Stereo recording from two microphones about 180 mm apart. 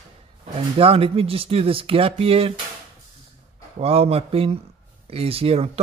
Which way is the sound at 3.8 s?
35° right (ahead or behind).